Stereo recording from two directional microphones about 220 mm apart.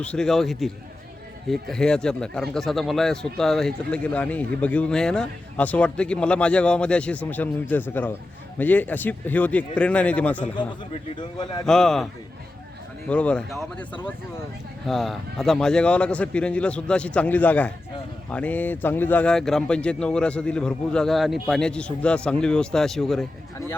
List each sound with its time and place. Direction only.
0.0 s speech: 5° left (ahead or behind)
10.6 s a man's voice: 20° left (ahead or behind)
11.6 s speech: centre (ahead or behind)
13.1 s speech: 5° left (ahead or behind)